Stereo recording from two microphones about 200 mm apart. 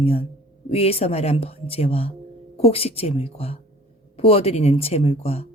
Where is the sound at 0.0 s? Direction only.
30° left (ahead or behind).